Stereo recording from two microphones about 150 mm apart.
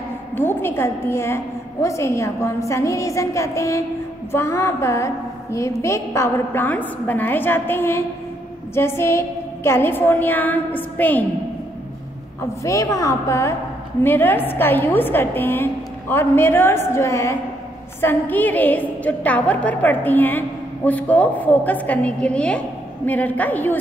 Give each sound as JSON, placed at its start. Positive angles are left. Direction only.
{"t": 0.4, "sound": "a woman's voice", "side_deg": 15}
{"t": 12.4, "sound": "a woman's voice", "side_deg": 20}